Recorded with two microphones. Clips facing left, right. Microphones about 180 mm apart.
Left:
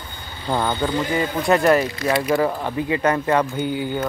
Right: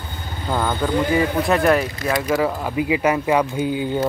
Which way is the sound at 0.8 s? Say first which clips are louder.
Right 3 dB; centre (ahead or behind).